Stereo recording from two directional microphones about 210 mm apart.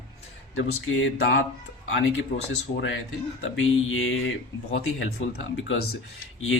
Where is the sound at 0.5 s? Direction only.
75° left (ahead or behind).